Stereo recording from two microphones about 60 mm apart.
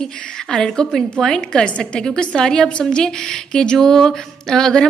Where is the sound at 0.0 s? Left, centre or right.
Centre.